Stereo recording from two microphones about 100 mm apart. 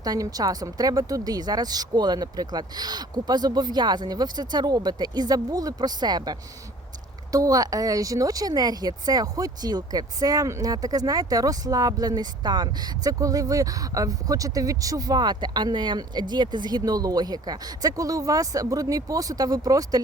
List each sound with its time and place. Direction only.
0.0 s speech: 40° right (ahead or behind)